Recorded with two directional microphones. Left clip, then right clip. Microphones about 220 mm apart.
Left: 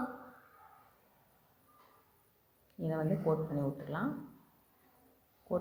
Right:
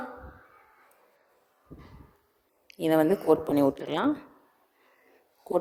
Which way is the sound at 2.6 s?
45° right (ahead or behind).